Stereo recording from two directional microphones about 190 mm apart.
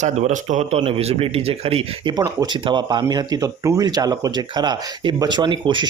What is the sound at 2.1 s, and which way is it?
Speech, 20° right (ahead or behind).